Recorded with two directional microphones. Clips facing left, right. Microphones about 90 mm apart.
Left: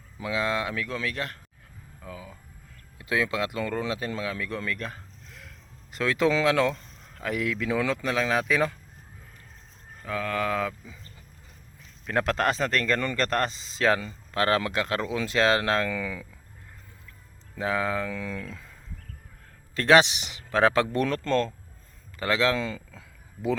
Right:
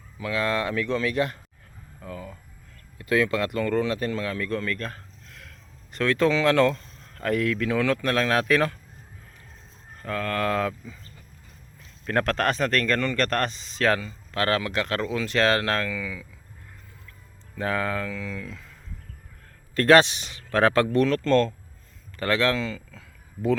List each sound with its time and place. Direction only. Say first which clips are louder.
0.2 s speech: right 2 dB; 15° left (ahead or behind)
5.5 s a sound: right 1 dB; 15° left (ahead or behind)
6.4 s speech: right 3 dB; 10° left (ahead or behind)
8.0 s speech: right 3 dB; 5° left (ahead or behind)
10.0 s speech: right 2 dB; 5° left (ahead or behind)
12.0 s speech: right 1 dB; 10° left (ahead or behind); by 16.2 s 30° left (ahead or behind)
17.6 s speech: even; 15° left (ahead or behind)
19.8 s speech: right 2 dB; 15° left (ahead or behind)
21.2 s speech: right 5 dB; 5° left (ahead or behind)
22.5 s speech: right 1 dB; 25° left (ahead or behind)